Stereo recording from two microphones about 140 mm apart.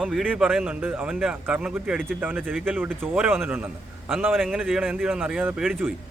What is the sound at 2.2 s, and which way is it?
Speech, 10° right (ahead or behind).